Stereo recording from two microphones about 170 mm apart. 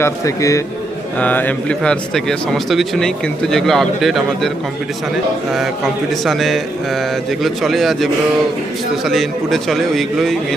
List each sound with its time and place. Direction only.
0.0 s a man's voice: 20° left (ahead or behind); by 10.3 s centre (ahead or behind)